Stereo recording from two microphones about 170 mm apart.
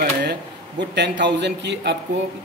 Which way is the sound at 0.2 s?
85° right.